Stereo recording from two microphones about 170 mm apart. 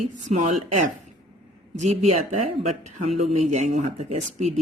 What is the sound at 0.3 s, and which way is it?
Speech, 40° right (ahead or behind).